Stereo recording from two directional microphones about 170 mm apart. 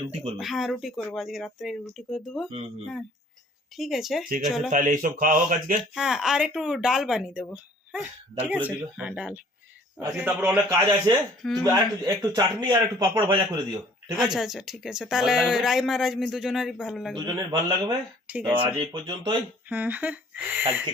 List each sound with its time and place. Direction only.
0.3 s speech: centre (ahead or behind)
3.8 s speech: centre (ahead or behind)
4.7 s speech: 50° right (ahead or behind)
5.9 s speech: centre (ahead or behind)
10.7 s a man's voice: 25° right (ahead or behind)
14.2 s speech: centre (ahead or behind)
17.2 s a man's voice: 25° right (ahead or behind)
18.3 s speech: 10° right (ahead or behind)
19.0 s a man's voice: 25° right (ahead or behind)
19.6 s speech: 10° right (ahead or behind)